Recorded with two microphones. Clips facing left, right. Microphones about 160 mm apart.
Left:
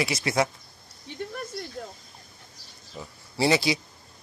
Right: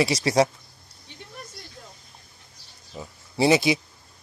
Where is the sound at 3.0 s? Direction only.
20° right (ahead or behind).